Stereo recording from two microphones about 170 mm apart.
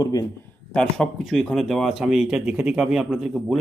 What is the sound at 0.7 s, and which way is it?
Speech, 5° left (ahead or behind).